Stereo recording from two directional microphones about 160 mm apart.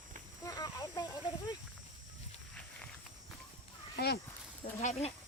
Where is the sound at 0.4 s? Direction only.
20° left (ahead or behind).